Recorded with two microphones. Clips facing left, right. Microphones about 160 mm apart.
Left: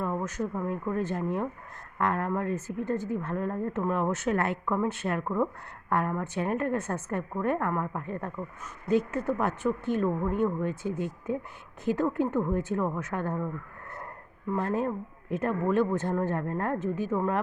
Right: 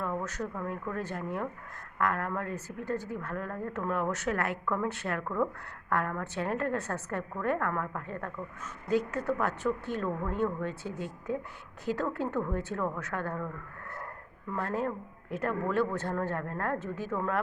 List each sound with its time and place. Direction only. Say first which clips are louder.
0.0 s a woman's voice: left 3 dB; 20° left (ahead or behind)
14.5 s a woman's voice: left 4 dB; 20° left (ahead or behind)